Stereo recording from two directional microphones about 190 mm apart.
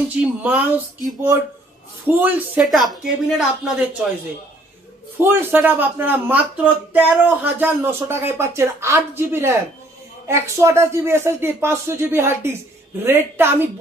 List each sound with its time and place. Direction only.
0.2 s speech: 5° right (ahead or behind)
5.1 s speech: 10° right (ahead or behind)